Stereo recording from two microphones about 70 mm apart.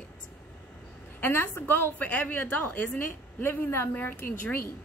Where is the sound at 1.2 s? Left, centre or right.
Left.